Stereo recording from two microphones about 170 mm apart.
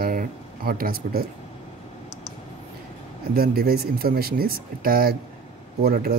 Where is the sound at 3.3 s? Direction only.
60° right (ahead or behind).